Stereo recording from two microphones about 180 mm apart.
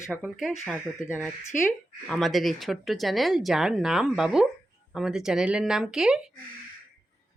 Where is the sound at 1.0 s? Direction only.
15° left (ahead or behind).